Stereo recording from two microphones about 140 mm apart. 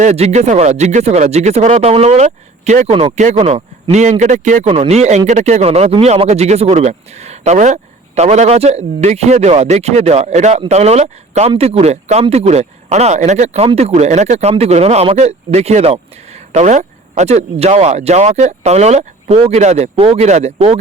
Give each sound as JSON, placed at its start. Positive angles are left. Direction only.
{"t": 0.0, "sound": "speech", "side_deg": -50}
{"t": 2.9, "sound": "a man's voice", "side_deg": -40}
{"t": 4.7, "sound": "speech", "side_deg": -45}